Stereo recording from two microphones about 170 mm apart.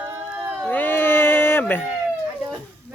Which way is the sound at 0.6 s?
10° left (ahead or behind).